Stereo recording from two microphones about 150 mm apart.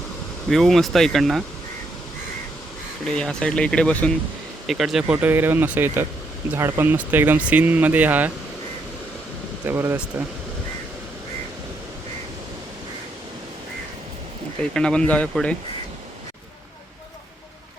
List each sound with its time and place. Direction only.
0.5 s speech: centre (ahead or behind)
3.2 s speech: 5° left (ahead or behind); by 8.3 s 10° right (ahead or behind)
9.6 s speech: 15° right (ahead or behind)
14.6 s speech: 5° left (ahead or behind)